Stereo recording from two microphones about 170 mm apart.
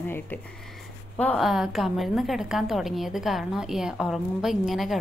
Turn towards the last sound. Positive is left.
turn(degrees=0)  # may be behind; listen again after turning